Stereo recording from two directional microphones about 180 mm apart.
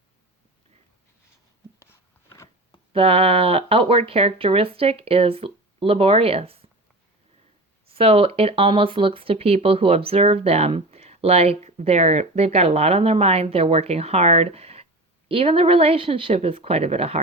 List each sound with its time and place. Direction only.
1.8 s a sound: 15° left (ahead or behind)
2.9 s speech: 30° right (ahead or behind)
7.9 s speech: 30° right (ahead or behind)